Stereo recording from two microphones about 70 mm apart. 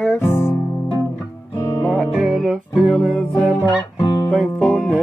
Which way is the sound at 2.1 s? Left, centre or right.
Centre.